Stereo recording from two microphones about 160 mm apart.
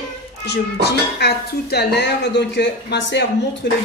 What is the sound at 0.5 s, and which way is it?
Speech, 90° left.